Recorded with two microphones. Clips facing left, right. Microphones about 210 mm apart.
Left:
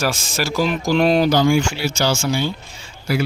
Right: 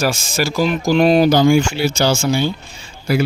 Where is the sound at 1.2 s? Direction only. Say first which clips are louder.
Right 3 dB; 15° right (ahead or behind).